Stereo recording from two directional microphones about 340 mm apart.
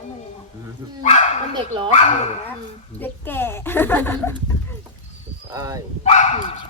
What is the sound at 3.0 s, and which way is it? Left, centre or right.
Speech, centre.